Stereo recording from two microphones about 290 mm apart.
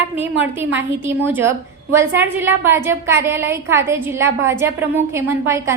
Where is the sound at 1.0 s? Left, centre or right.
Centre.